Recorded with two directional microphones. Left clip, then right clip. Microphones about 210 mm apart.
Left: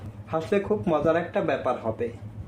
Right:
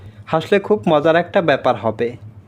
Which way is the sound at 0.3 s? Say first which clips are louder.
Right 9 dB; 40° right (ahead or behind).